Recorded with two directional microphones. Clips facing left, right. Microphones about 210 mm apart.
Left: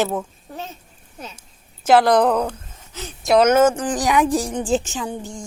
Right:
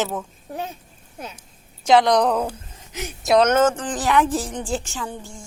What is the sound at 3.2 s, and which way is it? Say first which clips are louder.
A woman's voice: left 2 dB; 5° left (ahead or behind).